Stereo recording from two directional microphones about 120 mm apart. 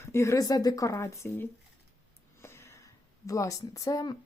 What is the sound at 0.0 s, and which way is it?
Speech, 20° left (ahead or behind).